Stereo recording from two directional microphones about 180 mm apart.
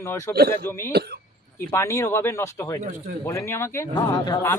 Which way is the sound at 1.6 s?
15° left (ahead or behind).